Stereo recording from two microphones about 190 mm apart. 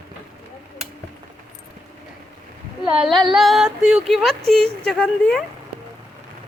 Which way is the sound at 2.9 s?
Centre (ahead or behind).